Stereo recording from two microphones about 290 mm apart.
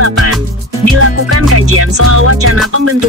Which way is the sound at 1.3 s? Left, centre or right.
Right.